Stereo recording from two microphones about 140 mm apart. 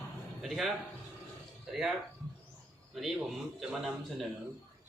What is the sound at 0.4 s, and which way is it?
A man's voice, centre (ahead or behind).